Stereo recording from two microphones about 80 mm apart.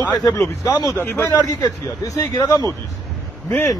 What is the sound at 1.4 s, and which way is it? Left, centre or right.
Speech, left.